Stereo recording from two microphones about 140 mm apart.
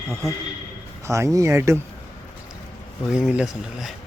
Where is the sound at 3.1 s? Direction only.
5° right (ahead or behind).